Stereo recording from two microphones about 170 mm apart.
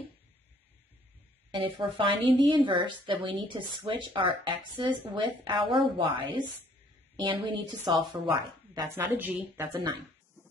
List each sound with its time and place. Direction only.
1.5 s a woman's voice: 30° right (ahead or behind)
8.8 s a woman's voice: 15° right (ahead or behind)